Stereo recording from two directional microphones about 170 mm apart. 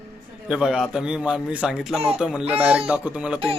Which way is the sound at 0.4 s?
5° right (ahead or behind).